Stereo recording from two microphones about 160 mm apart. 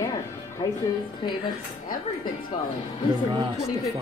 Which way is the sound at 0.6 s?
30° left (ahead or behind).